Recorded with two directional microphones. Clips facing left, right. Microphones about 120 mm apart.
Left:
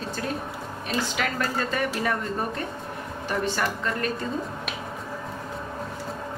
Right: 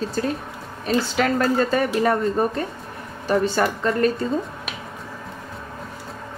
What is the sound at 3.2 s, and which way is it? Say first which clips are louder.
Speech: right 7 dB; 35° right (ahead or behind).